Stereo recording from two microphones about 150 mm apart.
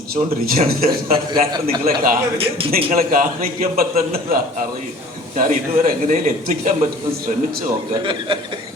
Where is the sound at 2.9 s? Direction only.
70° right (ahead or behind).